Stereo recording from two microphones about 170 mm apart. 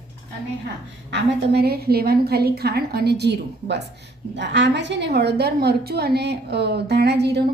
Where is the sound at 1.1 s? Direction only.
80° right.